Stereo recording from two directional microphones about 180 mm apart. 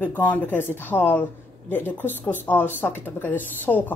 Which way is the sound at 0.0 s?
10° left (ahead or behind).